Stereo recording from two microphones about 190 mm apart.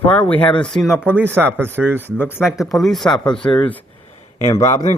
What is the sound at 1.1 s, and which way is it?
Speech, 10° right (ahead or behind).